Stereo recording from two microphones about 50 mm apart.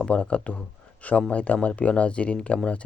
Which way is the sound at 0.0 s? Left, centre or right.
Left.